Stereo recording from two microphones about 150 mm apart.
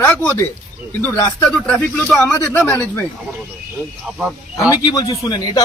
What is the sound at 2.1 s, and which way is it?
Speech, 10° left (ahead or behind).